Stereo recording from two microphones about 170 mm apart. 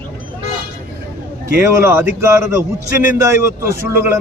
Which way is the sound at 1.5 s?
15° right (ahead or behind).